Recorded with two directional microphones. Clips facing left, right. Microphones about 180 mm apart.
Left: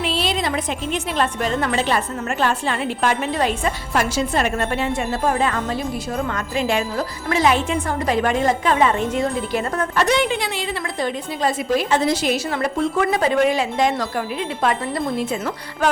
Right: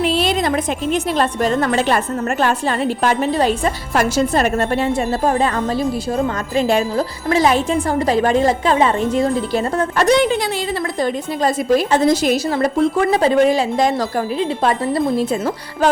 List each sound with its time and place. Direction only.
0.0 s a woman's voice: 50° right (ahead or behind)